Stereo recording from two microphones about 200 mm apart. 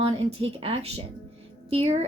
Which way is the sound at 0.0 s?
30° right (ahead or behind).